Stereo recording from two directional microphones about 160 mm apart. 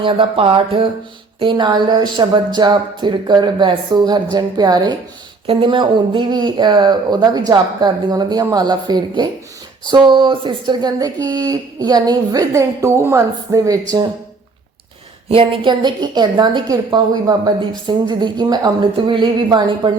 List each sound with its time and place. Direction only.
0.0 s a woman's voice: 30° right (ahead or behind)
15.3 s a woman's voice: 30° right (ahead or behind)